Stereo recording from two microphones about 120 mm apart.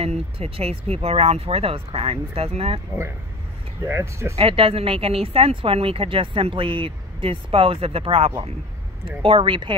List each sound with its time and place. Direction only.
0.0 s speech: 55° right (ahead or behind)
3.8 s speech: 20° right (ahead or behind)
4.4 s speech: 50° right (ahead or behind)